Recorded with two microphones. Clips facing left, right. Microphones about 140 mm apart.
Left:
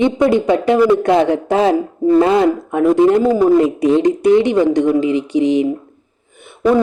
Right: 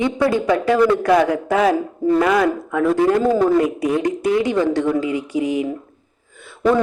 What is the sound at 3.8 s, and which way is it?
Speech, 25° left (ahead or behind).